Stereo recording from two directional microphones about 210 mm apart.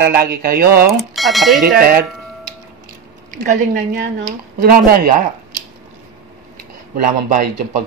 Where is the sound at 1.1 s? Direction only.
Centre (ahead or behind).